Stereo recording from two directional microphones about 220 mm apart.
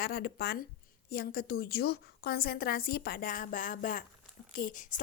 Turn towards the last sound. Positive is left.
turn(degrees=35)  # may be behind; listen again after turning